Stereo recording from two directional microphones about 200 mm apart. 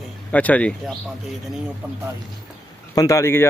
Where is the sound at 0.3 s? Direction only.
5° left (ahead or behind).